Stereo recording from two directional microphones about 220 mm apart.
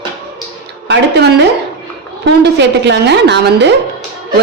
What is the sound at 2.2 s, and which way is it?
A woman's voice, 50° right (ahead or behind).